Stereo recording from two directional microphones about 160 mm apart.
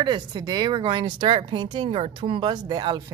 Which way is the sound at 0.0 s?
30° right (ahead or behind).